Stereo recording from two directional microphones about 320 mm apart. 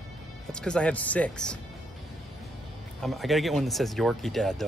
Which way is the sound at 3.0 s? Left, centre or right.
Centre.